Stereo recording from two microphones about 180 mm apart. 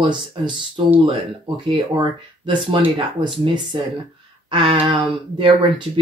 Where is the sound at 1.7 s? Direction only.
25° right (ahead or behind).